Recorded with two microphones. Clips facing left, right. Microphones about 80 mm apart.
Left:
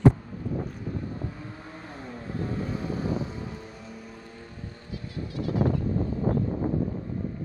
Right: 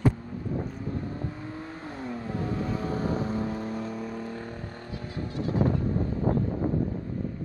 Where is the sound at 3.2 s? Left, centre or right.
Right.